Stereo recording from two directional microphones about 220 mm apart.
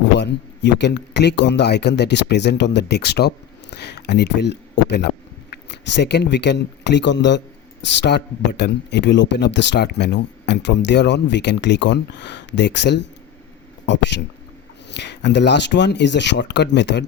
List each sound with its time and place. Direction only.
0.2 s a man's voice: 50° left (ahead or behind)